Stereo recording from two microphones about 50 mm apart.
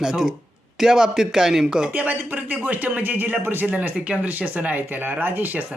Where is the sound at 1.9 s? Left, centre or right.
Right.